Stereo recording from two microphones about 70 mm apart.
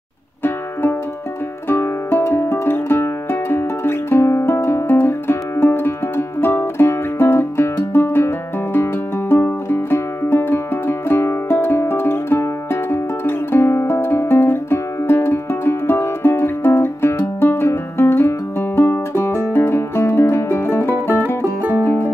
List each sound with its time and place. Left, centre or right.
1.7 s music: left